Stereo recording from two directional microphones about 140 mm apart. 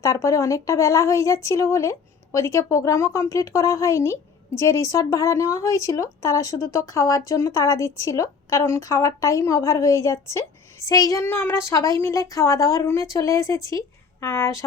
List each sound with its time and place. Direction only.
0.0 s speech: 20° left (ahead or behind)